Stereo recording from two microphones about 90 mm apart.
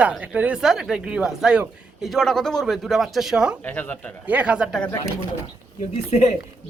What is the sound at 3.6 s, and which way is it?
Speech, 20° left (ahead or behind).